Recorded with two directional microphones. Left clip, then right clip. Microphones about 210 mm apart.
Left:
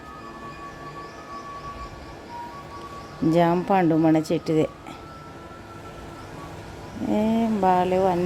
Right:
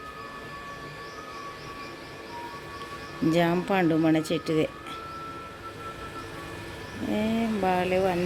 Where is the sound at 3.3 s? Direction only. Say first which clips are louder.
Left 5 dB; 10° left (ahead or behind).